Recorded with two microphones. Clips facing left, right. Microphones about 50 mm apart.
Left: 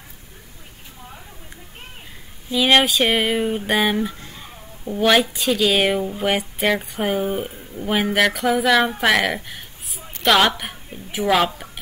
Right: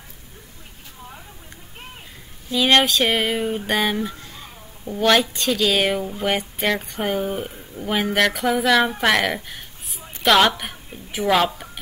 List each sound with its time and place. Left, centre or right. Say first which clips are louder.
2.5 s a woman's voice: left 1 dB; centre